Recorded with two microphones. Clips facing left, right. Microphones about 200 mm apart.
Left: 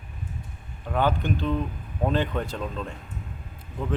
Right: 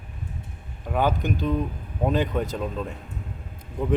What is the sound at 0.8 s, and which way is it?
A man's voice, 10° right (ahead or behind).